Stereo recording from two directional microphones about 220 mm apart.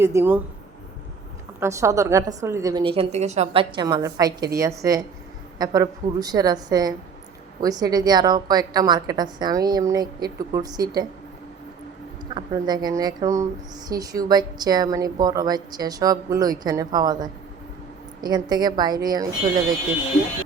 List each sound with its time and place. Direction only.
0.0 s speech: 10° right (ahead or behind)
1.5 s speech: 15° right (ahead or behind)
12.3 s a woman's voice: 20° right (ahead or behind)